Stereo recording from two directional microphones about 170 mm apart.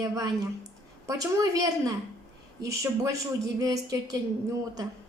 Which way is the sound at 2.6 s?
20° right (ahead or behind).